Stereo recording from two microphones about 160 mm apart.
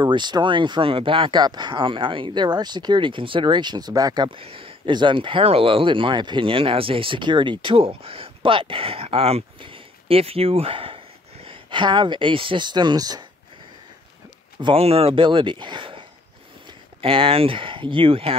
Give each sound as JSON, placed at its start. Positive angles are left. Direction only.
{"t": 0.0, "sound": "speech", "side_deg": -25}
{"t": 14.6, "sound": "speech", "side_deg": -35}